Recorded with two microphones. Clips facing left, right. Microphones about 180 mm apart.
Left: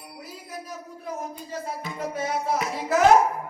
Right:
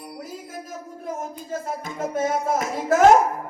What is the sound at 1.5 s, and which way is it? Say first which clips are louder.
Speech: right 5 dB; 45° right (ahead or behind).